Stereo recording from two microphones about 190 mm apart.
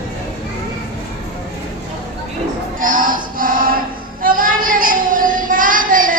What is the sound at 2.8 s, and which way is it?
Music, 45° right (ahead or behind).